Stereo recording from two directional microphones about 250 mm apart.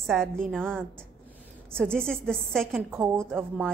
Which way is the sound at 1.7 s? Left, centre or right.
Centre.